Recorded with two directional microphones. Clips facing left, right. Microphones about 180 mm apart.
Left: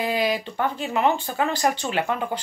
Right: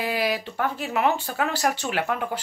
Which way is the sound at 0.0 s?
5° right (ahead or behind).